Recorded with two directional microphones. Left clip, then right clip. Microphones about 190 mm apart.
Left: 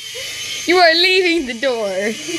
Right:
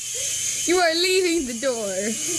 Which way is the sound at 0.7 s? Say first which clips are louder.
Left 8 dB; 5° left (ahead or behind).